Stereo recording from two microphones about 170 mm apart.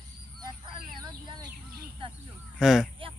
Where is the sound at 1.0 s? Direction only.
25° right (ahead or behind).